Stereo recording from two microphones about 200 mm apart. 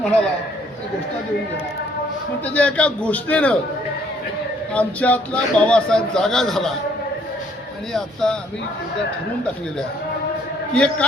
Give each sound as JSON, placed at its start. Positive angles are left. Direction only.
{"t": 2.5, "sound": "a man's voice", "side_deg": 5}
{"t": 4.7, "sound": "speech", "side_deg": 5}
{"t": 7.9, "sound": "speech", "side_deg": 5}
{"t": 10.8, "sound": "speech", "side_deg": 5}